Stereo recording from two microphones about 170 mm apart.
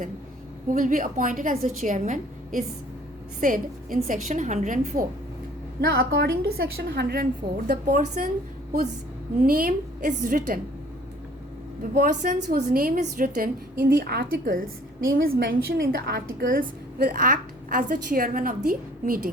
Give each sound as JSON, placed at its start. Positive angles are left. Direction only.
{"t": 0.7, "sound": "a woman's voice", "side_deg": -50}
{"t": 5.8, "sound": "a woman's voice", "side_deg": -70}
{"t": 7.7, "sound": "a woman's voice", "side_deg": -50}
{"t": 9.4, "sound": "a woman's voice", "side_deg": -55}
{"t": 11.8, "sound": "a woman's voice", "side_deg": -55}